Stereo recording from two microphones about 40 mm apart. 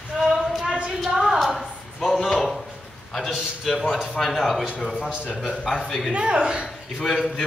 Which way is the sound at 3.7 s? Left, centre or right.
Centre.